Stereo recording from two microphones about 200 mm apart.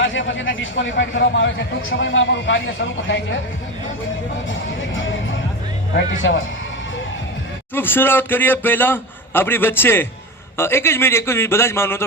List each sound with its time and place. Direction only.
0.0 s a man's voice: 70° left (ahead or behind)
4.4 s music: 70° left (ahead or behind)
6.2 s a man's voice: 65° left (ahead or behind)
7.7 s a man's voice: 10° left (ahead or behind)